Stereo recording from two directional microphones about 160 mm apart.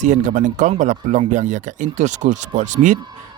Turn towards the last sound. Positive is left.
turn(degrees=-50)  # may be behind; listen again after turning